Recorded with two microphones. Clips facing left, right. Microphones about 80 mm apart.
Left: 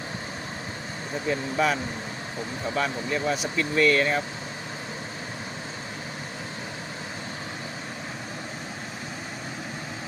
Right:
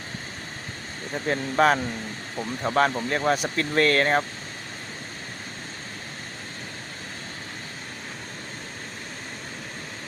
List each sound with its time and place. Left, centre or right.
1.3 s speech: right